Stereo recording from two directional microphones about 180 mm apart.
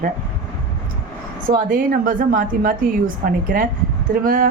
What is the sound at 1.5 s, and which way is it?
Speech, 50° right (ahead or behind).